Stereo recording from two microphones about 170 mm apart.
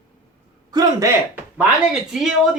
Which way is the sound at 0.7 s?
20° right (ahead or behind).